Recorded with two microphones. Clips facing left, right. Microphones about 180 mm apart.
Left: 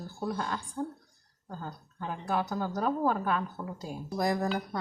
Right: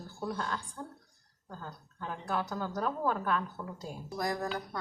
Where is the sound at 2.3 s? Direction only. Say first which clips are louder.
Left 3 dB; 10° left (ahead or behind).